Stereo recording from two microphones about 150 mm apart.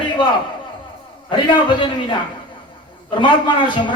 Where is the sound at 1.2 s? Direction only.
35° left (ahead or behind).